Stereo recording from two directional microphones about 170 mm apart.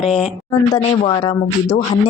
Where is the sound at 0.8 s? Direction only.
35° left (ahead or behind).